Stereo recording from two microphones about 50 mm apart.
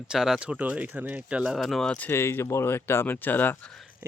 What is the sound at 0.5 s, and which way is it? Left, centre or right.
Speech, right.